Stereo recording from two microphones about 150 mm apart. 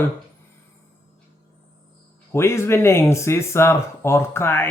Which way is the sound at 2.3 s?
15° left (ahead or behind).